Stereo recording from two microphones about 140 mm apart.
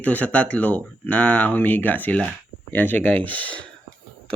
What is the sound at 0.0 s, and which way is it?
Speech, 10° left (ahead or behind).